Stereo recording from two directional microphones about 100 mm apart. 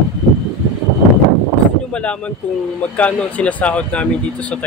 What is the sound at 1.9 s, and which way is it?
Speech, 10° left (ahead or behind).